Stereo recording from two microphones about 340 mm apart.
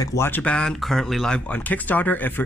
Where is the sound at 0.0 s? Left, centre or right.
Centre.